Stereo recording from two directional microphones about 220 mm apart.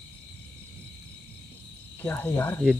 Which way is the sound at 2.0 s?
5° left (ahead or behind).